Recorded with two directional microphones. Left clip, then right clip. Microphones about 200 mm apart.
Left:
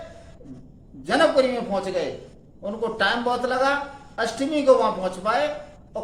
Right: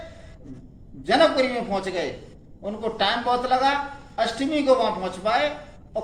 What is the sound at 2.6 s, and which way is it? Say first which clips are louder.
A man's voice: left 1 dB; 15° left (ahead or behind).